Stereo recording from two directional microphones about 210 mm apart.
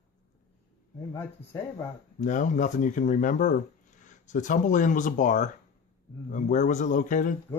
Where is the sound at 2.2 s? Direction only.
35° left (ahead or behind).